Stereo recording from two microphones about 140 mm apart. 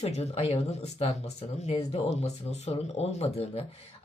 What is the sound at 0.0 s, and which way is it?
Speech, 50° left (ahead or behind).